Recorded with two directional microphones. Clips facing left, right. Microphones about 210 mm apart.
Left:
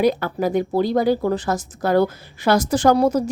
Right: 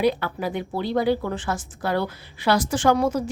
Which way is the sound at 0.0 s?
40° left (ahead or behind).